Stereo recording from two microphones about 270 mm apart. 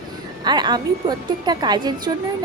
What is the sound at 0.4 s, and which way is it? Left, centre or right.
A woman's voice, centre.